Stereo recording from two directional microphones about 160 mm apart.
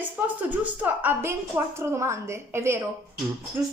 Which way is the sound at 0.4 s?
10° right (ahead or behind).